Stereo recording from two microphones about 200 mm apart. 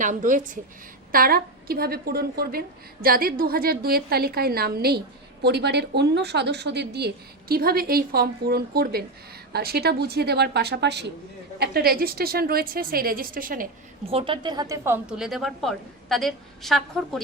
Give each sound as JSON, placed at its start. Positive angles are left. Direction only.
{"t": 0.0, "sound": "a woman's voice", "side_deg": -40}
{"t": 14.0, "sound": "a woman's voice", "side_deg": -30}